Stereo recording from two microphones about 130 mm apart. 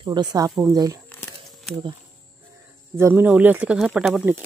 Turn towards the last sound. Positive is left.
turn(degrees=-5)  # may be behind; listen again after turning